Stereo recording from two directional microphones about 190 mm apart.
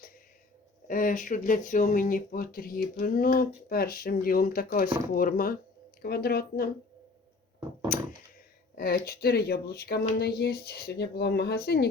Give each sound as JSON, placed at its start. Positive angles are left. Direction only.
{"t": 0.9, "sound": "speech", "side_deg": 45}
{"t": 7.9, "sound": "a sound", "side_deg": 45}
{"t": 8.7, "sound": "speech", "side_deg": 50}